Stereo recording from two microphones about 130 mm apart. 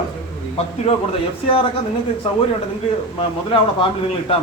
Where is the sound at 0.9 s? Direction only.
50° left (ahead or behind).